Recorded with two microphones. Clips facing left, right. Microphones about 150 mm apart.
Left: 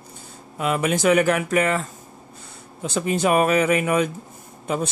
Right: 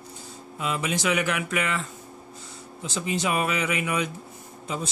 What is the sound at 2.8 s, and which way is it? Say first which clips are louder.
Speech: left 6 dB; 55° left (ahead or behind).